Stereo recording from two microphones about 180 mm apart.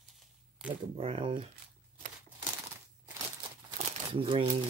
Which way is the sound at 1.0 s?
30° right (ahead or behind).